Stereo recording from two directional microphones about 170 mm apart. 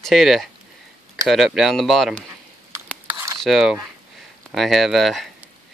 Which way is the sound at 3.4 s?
Centre (ahead or behind).